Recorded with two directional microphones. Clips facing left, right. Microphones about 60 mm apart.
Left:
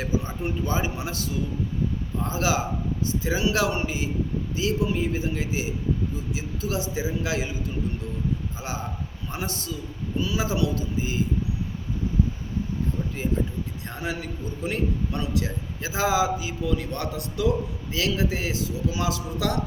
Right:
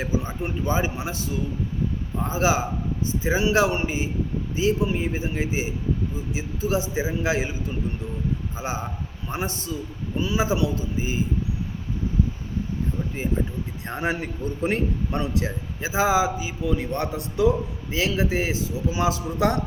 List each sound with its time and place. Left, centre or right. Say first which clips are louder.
0.0 s a man's voice: right 1 dB; centre
8.5 s a man's voice: right 3 dB; right
13.2 s a man's voice: right 1 dB; right
13.8 s a man's voice: right 7 dB; right